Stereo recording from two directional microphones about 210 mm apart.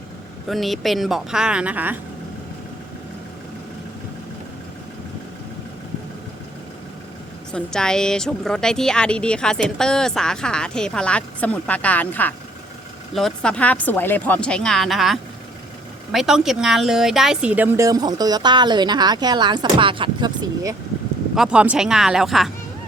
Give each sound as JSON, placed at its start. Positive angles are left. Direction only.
{"t": 0.4, "sound": "speech", "side_deg": 0}
{"t": 7.5, "sound": "speech", "side_deg": 5}
{"t": 21.3, "sound": "speech", "side_deg": -5}